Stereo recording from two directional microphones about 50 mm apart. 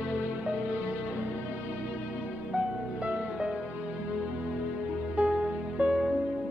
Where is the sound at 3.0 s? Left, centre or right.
Centre.